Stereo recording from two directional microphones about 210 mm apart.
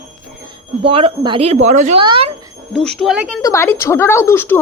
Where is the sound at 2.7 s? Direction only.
5° left (ahead or behind).